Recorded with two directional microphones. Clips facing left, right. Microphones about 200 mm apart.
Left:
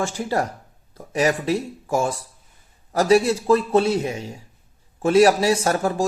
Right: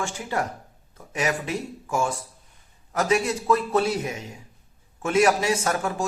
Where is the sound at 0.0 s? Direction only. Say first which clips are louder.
Left 5 dB; 35° left (ahead or behind).